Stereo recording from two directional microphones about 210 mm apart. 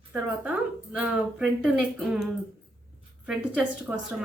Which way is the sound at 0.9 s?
5° right (ahead or behind).